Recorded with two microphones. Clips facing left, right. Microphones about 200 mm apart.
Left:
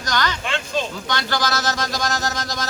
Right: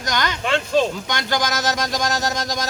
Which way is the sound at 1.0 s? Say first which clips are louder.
Right 1 dB; 15° right (ahead or behind).